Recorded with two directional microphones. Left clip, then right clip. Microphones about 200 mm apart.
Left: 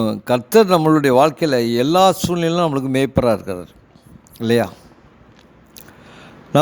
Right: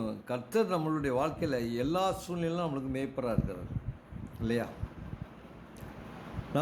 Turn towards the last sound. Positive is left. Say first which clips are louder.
# left 18 dB
turn(degrees=55)  # may be behind; listen again after turning